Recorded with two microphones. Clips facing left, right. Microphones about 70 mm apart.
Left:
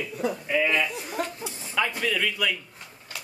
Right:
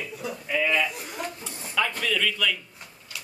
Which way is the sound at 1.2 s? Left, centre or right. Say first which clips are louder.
Left 4 dB; left.